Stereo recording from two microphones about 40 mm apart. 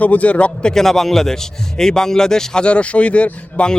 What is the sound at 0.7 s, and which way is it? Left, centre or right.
A man's voice, centre.